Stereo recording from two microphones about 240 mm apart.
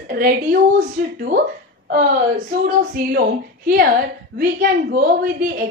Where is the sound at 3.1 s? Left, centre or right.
Right.